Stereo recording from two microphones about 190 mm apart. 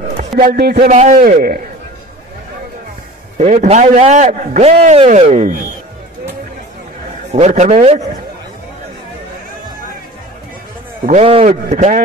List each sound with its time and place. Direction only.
0.4 s speech: 55° right (ahead or behind)
0.9 s a man's voice: 35° right (ahead or behind)
3.3 s a man's voice: 35° right (ahead or behind)
7.3 s a man's voice: 35° right (ahead or behind)
11.1 s a man's voice: 35° right (ahead or behind)